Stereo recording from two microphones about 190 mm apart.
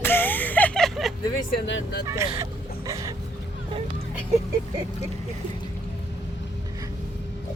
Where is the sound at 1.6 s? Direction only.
70° left (ahead or behind).